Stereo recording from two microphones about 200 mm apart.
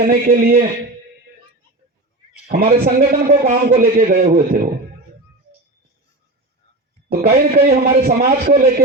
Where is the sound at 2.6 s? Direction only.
35° right (ahead or behind).